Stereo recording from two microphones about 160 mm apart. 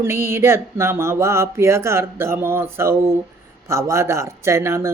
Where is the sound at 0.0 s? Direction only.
15° right (ahead or behind).